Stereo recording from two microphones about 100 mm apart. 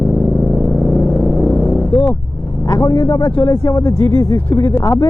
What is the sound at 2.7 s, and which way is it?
Speech, 35° left (ahead or behind).